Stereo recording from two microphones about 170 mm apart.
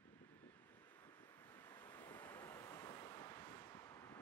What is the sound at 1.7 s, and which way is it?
Waves, 10° left (ahead or behind).